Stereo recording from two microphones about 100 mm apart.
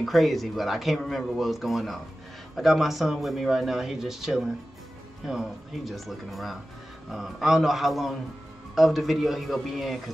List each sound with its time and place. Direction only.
0.0 s speech: centre (ahead or behind)